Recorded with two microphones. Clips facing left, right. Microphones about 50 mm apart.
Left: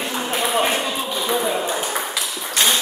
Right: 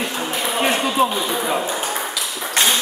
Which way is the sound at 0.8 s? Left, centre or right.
Right.